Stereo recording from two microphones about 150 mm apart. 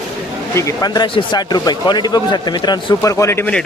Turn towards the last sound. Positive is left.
turn(degrees=20)  # may be behind; listen again after turning